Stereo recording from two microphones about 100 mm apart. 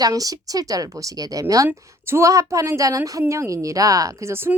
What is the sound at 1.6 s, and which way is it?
A woman's voice, 25° right (ahead or behind).